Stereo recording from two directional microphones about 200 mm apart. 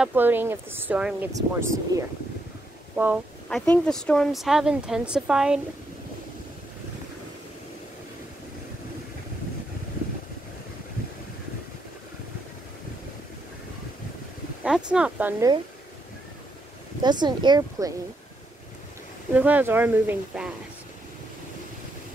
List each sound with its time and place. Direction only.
0.0 s speech: 10° right (ahead or behind)
3.4 s speech: 5° left (ahead or behind)
14.6 s speech: 5° right (ahead or behind)
17.0 s speech: 20° right (ahead or behind)
19.3 s speech: 10° right (ahead or behind)